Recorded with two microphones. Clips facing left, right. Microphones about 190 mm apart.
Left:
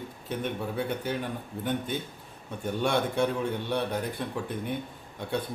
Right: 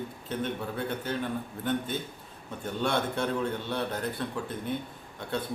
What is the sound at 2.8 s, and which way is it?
A man's voice, 15° left (ahead or behind).